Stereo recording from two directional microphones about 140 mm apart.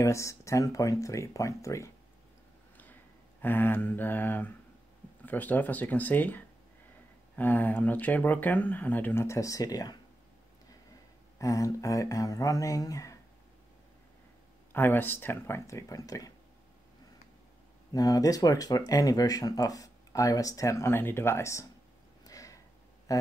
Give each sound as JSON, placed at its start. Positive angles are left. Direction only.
{"t": 0.0, "sound": "speech", "side_deg": 20}
{"t": 11.3, "sound": "speech", "side_deg": 25}
{"t": 14.7, "sound": "speech", "side_deg": 15}
{"t": 17.9, "sound": "speech", "side_deg": 25}
{"t": 22.2, "sound": "a sound", "side_deg": 25}